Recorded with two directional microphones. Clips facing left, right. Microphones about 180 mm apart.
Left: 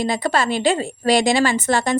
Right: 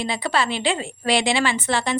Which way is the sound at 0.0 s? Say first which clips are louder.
Left 3 dB; 45° left (ahead or behind).